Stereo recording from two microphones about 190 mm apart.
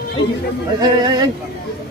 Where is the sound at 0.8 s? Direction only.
20° right (ahead or behind).